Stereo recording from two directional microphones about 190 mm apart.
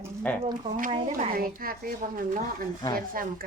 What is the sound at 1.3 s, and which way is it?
Speech, 50° right (ahead or behind).